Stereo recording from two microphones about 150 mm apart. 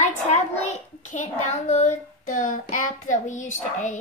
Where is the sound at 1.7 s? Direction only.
50° left (ahead or behind).